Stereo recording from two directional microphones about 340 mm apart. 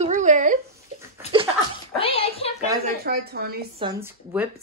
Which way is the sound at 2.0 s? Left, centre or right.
Centre.